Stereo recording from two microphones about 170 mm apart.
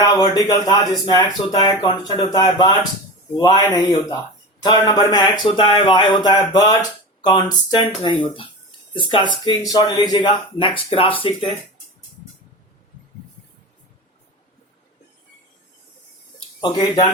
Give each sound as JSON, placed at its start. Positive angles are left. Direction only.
{"t": 0.0, "sound": "speech", "side_deg": 20}
{"t": 16.6, "sound": "speech", "side_deg": 25}